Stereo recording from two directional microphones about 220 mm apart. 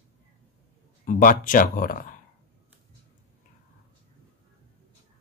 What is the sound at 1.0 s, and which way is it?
Speech, 40° left (ahead or behind).